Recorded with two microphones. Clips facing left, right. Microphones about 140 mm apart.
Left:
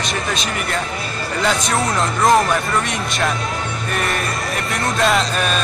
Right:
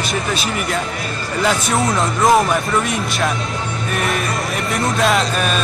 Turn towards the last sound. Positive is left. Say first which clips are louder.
# right 1 dB
turn(degrees=0)  # may be behind; listen again after turning